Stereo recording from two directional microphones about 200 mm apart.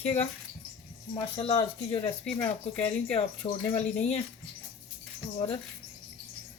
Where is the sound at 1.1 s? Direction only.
25° left (ahead or behind).